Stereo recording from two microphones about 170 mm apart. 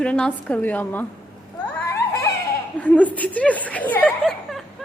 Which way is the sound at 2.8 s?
10° left (ahead or behind).